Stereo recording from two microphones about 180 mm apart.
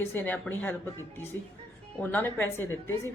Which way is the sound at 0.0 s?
10° left (ahead or behind).